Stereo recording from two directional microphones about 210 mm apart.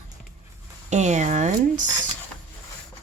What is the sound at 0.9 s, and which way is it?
Speech, 35° right (ahead or behind).